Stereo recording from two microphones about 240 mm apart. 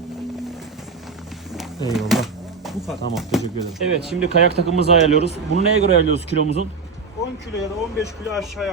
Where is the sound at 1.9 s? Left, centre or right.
Centre.